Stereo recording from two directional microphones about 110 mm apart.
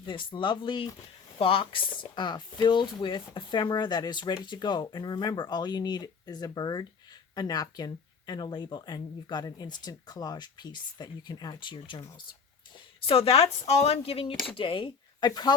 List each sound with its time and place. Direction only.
0.0 s speech: 50° left (ahead or behind)
13.1 s speech: 60° left (ahead or behind); by 15.5 s 40° left (ahead or behind)